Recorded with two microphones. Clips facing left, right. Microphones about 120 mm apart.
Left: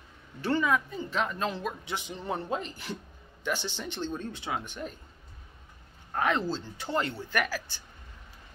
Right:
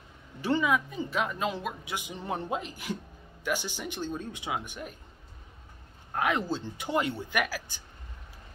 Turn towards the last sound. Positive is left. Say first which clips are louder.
# even
turn(degrees=-10)  # may be behind; listen again after turning